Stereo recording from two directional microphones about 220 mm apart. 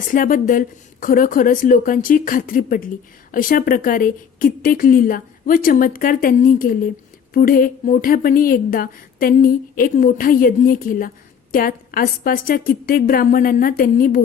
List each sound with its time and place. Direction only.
0.1 s a woman's voice: 40° left (ahead or behind)